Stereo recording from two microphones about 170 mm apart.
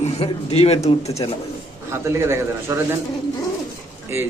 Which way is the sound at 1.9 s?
15° right (ahead or behind).